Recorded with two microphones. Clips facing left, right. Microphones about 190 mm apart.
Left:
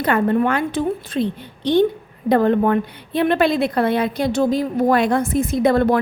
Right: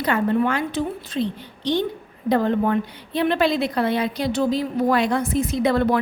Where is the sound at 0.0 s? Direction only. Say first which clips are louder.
Left 3 dB; 55° left (ahead or behind).